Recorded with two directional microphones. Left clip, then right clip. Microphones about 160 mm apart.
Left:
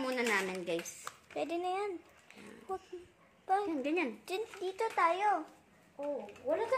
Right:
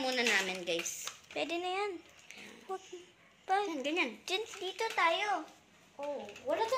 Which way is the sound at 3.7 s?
60° left (ahead or behind).